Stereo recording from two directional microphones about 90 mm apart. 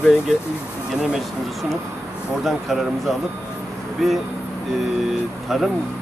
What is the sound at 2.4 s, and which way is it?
Speech, centre (ahead or behind).